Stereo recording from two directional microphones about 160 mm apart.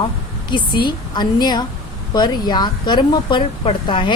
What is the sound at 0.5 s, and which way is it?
Speech, 30° left (ahead or behind).